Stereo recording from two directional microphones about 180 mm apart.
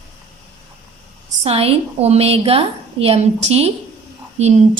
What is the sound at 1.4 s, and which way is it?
A woman's voice, 35° right (ahead or behind).